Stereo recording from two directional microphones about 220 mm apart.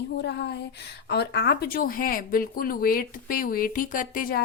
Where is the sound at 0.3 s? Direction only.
50° left (ahead or behind).